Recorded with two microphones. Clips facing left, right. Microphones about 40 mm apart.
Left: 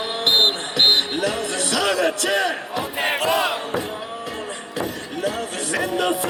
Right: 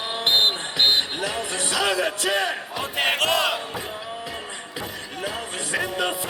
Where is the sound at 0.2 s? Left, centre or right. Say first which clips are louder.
Left 2 dB; left.